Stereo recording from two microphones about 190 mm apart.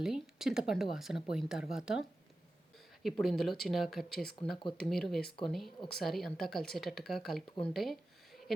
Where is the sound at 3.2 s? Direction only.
Centre (ahead or behind).